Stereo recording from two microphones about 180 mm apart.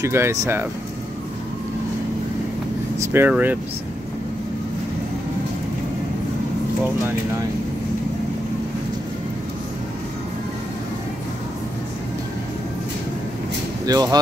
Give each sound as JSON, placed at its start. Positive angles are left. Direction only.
{"t": 0.0, "sound": "speech", "side_deg": -15}
{"t": 3.0, "sound": "speech", "side_deg": -10}
{"t": 13.8, "sound": "speech", "side_deg": -20}